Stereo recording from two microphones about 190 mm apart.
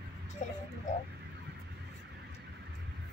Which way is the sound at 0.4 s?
40° left (ahead or behind).